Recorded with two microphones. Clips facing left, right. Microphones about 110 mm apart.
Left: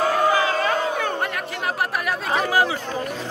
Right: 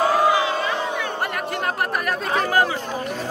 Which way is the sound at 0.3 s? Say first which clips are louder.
Left 1 dB; 45° left (ahead or behind).